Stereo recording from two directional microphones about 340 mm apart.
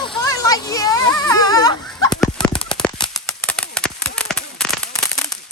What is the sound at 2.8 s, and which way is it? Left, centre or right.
Horse, centre.